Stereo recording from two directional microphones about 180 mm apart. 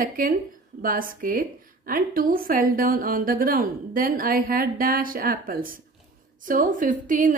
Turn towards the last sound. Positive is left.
turn(degrees=-45)  # may be behind; listen again after turning